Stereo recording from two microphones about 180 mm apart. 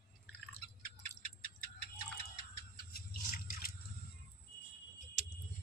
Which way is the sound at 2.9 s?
55° left (ahead or behind).